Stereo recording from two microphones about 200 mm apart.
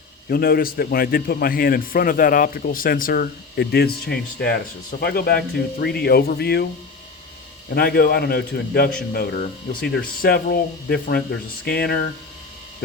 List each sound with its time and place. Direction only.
0.3 s a man's voice: 50° left (ahead or behind)
7.7 s a man's voice: 50° left (ahead or behind)